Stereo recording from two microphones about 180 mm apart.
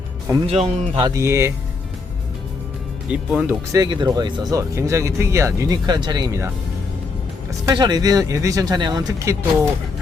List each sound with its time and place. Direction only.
0.3 s speech: 20° right (ahead or behind)
3.1 s speech: 5° right (ahead or behind)
3.7 s speech: 20° right (ahead or behind)
7.7 s speech: 25° right (ahead or behind)